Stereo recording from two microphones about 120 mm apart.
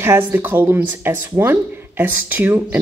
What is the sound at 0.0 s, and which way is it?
Speech, 20° right (ahead or behind).